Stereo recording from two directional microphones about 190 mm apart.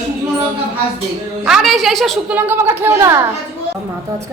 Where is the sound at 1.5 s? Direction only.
Centre (ahead or behind).